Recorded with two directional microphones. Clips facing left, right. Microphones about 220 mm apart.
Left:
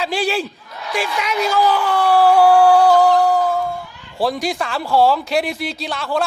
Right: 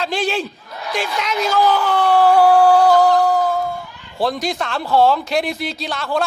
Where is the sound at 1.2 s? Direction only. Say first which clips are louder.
Even; 5° left (ahead or behind).